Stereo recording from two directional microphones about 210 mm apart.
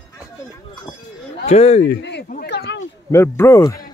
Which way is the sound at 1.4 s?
30° left (ahead or behind).